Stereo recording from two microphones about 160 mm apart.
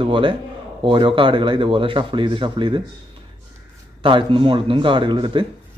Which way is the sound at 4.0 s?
30° right (ahead or behind).